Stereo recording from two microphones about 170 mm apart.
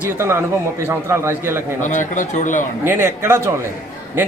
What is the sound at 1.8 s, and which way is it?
Speech, 45° left (ahead or behind).